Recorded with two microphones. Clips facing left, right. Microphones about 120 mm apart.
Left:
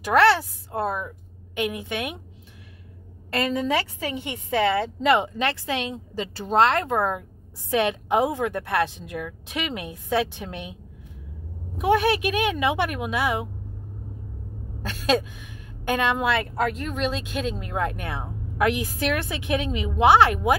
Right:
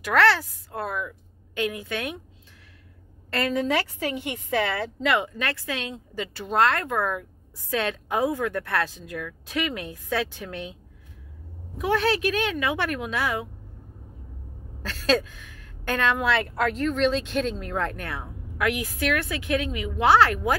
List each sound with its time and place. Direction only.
0.0 s a woman's voice: 20° left (ahead or behind)
3.3 s a woman's voice: 20° left (ahead or behind)
11.8 s a woman's voice: 15° left (ahead or behind)
14.8 s a woman's voice: 15° left (ahead or behind)
18.2 s a woman's voice: 30° left (ahead or behind)